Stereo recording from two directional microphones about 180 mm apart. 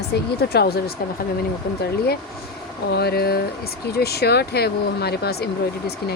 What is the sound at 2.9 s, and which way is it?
Speech, 60° left (ahead or behind).